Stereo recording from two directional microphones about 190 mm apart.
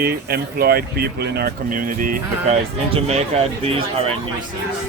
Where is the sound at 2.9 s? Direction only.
35° right (ahead or behind).